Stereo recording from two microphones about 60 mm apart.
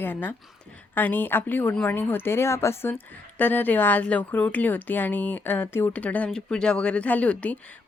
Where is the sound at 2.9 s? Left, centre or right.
Left.